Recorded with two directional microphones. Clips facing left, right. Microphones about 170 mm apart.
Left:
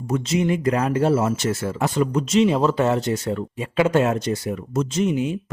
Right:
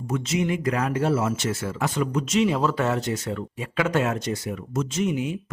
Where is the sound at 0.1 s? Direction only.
35° left (ahead or behind).